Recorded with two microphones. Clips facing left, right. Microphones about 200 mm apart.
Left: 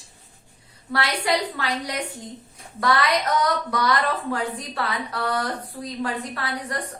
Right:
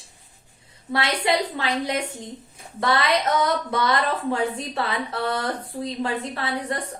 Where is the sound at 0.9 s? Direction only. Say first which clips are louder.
Right 1 dB; 25° right (ahead or behind).